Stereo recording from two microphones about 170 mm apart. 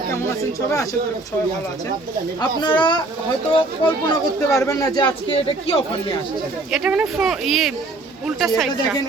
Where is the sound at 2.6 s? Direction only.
25° left (ahead or behind).